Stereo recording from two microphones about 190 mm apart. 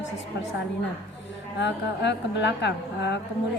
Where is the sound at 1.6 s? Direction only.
65° left (ahead or behind).